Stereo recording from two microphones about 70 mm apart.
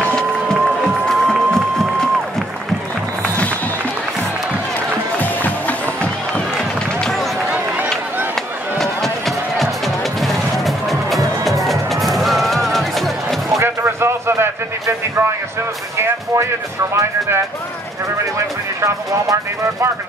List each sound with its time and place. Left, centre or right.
0.0 s music: centre
3.2 s music: centre
5.2 s music: left
7.0 s run: centre
7.5 s run: centre
8.7 s music: centre
13.6 s a sound: right
16.0 s music: right